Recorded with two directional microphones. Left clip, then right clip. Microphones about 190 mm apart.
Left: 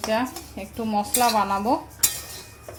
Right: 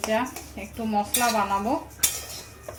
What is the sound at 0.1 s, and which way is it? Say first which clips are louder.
Speech: left 4 dB; 25° left (ahead or behind).